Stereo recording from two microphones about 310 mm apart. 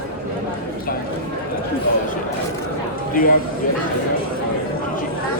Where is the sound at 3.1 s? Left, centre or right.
Left.